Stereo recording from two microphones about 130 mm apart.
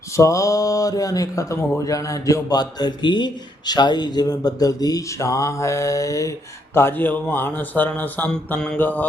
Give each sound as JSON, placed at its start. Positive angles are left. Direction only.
{"t": 0.2, "sound": "a man's voice", "side_deg": 25}